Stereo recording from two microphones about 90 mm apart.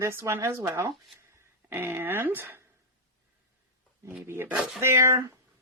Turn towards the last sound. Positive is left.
turn(degrees=-30)  # may be behind; listen again after turning